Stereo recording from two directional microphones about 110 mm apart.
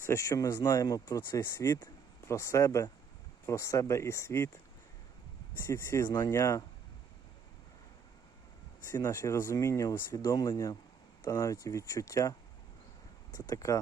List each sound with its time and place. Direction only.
0.0 s speech: 25° left (ahead or behind)
5.6 s speech: 20° left (ahead or behind)
9.0 s speech: 25° left (ahead or behind)
13.3 s speech: 30° left (ahead or behind)